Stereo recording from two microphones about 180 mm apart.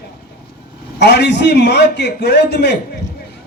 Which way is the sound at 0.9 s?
70° left (ahead or behind).